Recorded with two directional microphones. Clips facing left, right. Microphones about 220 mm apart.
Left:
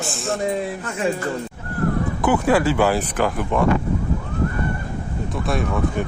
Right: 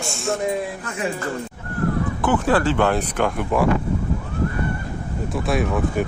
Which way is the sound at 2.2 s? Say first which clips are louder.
Left 1 dB; 10° left (ahead or behind).